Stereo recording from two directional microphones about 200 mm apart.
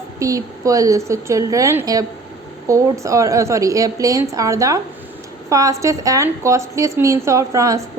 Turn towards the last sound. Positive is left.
turn(degrees=-15)  # may be behind; listen again after turning